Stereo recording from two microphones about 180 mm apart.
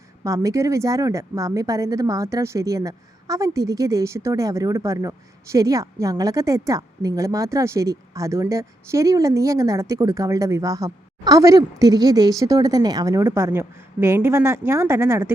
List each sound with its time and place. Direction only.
0.3 s speech: 15° right (ahead or behind)